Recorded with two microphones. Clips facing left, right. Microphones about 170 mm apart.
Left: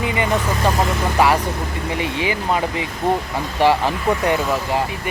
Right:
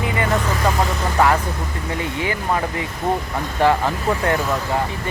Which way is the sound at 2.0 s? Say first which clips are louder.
Left 2 dB; 20° left (ahead or behind).